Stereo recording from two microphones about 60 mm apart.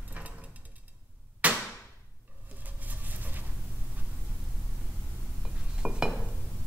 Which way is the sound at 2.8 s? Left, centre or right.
Right.